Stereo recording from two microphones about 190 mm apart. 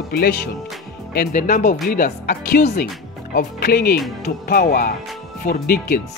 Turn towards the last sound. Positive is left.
turn(degrees=50)  # may be behind; listen again after turning